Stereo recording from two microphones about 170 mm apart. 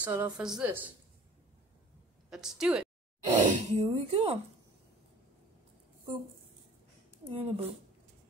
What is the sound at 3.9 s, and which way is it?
Speech, 30° right (ahead or behind).